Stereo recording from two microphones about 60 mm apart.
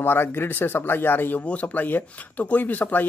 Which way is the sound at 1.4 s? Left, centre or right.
Left.